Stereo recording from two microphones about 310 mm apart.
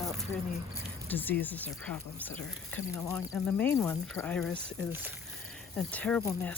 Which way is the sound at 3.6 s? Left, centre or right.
Centre.